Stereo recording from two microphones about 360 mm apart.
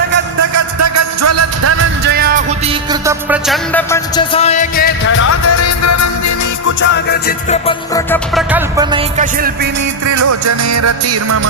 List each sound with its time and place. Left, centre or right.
0.3 s music: right
2.9 s music: centre; by 5.3 s left
5.3 s music: left
6.8 s music: left
7.7 s music: centre
8.5 s music: centre
10.1 s music: right